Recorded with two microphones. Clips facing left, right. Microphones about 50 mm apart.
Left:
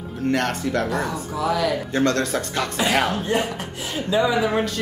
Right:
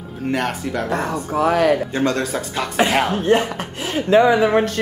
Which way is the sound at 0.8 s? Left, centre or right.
Right.